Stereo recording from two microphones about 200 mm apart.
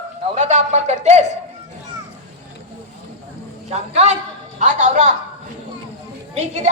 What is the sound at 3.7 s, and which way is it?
A woman's voice, 30° right (ahead or behind).